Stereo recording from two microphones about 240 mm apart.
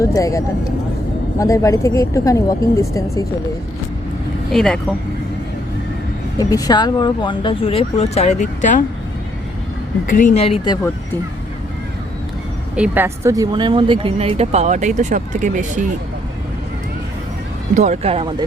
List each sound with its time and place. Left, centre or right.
0.0 s a woman's voice: centre
4.5 s speech: centre
6.3 s speech: centre; by 8.8 s left
10.1 s speech: left
12.7 s speech: centre; by 15.8 s right
17.7 s speech: right